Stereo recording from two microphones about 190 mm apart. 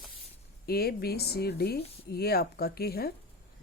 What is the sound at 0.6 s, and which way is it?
Speech, 55° left (ahead or behind).